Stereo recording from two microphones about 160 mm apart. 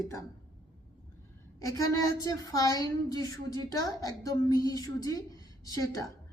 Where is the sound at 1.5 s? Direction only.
20° left (ahead or behind).